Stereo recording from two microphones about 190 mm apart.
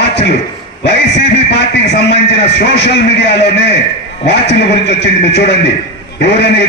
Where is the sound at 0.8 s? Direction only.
65° left (ahead or behind).